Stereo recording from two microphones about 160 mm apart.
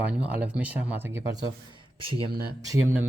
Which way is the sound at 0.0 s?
10° right (ahead or behind).